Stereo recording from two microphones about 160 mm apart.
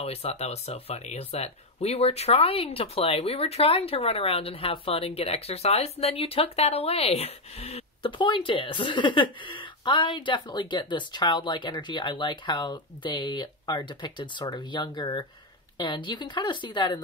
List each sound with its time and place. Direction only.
0.0 s a woman's voice: 40° left (ahead or behind)